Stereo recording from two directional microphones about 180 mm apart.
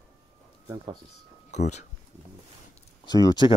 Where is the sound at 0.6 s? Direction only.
20° right (ahead or behind).